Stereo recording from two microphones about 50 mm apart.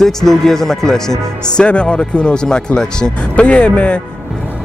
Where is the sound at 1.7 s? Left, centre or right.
Left.